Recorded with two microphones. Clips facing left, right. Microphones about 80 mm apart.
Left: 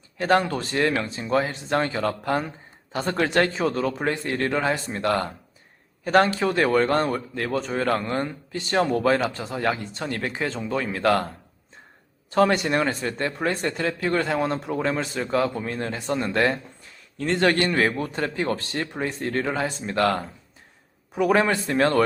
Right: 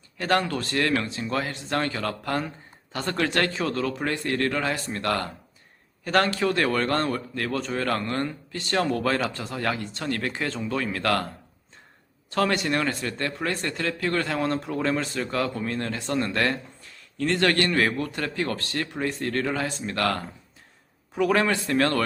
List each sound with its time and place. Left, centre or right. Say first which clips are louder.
0.2 s a man's voice: left 3 dB; centre
12.3 s a man's voice: left 4 dB; centre